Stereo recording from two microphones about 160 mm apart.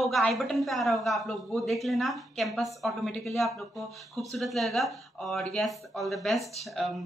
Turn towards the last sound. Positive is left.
turn(degrees=0)  # may be behind; listen again after turning